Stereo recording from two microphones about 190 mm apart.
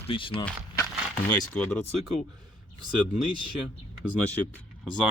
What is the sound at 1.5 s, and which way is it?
Speech, 5° left (ahead or behind).